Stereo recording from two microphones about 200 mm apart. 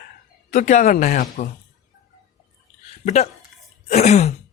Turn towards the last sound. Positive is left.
turn(degrees=35)  # may be behind; listen again after turning